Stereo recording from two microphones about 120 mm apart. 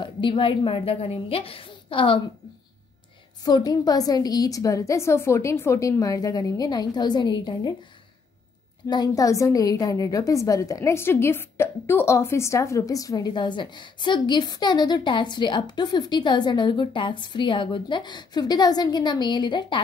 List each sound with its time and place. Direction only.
0.0 s a woman's voice: 45° left (ahead or behind)
3.4 s a woman's voice: 35° left (ahead or behind)
8.8 s a woman's voice: 35° left (ahead or behind)